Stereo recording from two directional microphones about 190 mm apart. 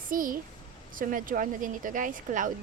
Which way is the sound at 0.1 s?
45° right (ahead or behind).